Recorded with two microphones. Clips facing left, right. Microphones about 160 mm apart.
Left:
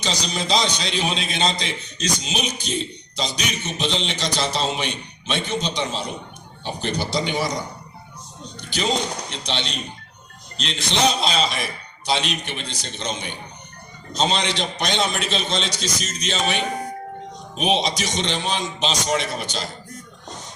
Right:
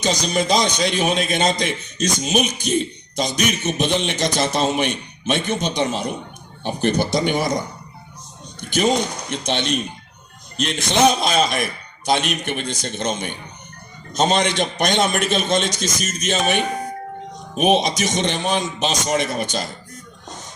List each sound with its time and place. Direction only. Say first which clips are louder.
0.0 s a man's voice: right 6 dB; 50° right (ahead or behind)
8.6 s a man's voice: right 5 dB; 50° right (ahead or behind)